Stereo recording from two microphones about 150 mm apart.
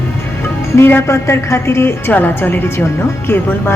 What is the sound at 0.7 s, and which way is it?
A woman's voice, 15° left (ahead or behind).